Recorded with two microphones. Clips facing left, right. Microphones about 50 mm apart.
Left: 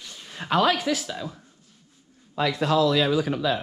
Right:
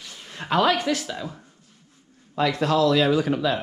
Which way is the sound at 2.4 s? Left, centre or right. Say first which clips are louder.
Right 1 dB; right.